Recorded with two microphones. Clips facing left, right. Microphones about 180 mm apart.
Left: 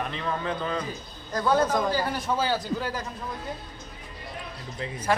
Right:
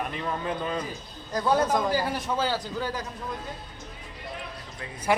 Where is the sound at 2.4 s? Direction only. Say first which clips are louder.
Left 1 dB; 10° left (ahead or behind).